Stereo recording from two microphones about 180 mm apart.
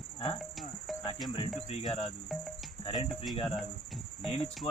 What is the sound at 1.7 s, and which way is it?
Cricket, 30° left (ahead or behind).